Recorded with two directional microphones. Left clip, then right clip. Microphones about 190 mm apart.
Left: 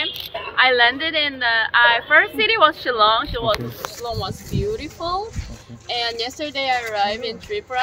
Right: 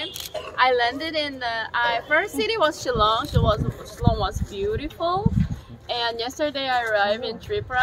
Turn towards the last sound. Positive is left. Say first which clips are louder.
# left 1 dB
turn(degrees=0)  # may be behind; listen again after turning